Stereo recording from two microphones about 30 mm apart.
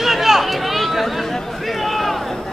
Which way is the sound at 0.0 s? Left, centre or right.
Centre.